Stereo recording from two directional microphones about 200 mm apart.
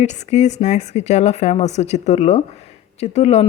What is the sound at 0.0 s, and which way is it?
Speech, 35° left (ahead or behind).